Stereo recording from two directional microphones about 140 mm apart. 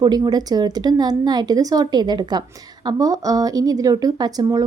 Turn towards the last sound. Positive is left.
turn(degrees=-25)  # may be behind; listen again after turning